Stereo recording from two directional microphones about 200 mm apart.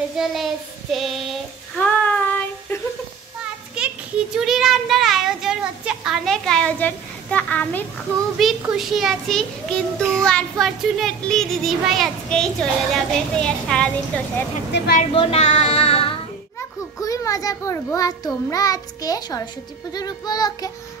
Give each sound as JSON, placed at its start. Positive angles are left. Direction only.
{"t": 0.2, "sound": "a child's voice", "side_deg": 0}
{"t": 1.8, "sound": "child singing", "side_deg": 5}
{"t": 3.8, "sound": "a sound", "side_deg": -5}
{"t": 4.4, "sound": "a child's voice", "side_deg": 0}
{"t": 14.7, "sound": "a woman's voice", "side_deg": 60}
{"t": 15.1, "sound": "child singing", "side_deg": 30}
{"t": 17.0, "sound": "a child's voice", "side_deg": 15}
{"t": 19.9, "sound": "child singing", "side_deg": 20}